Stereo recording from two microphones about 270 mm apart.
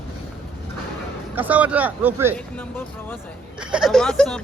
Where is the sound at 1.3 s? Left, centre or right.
Centre.